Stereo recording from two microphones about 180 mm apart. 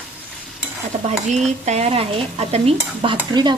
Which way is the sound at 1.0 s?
40° right (ahead or behind).